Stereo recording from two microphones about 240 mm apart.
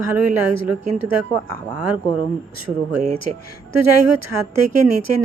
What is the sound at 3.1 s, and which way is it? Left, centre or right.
Speech, right.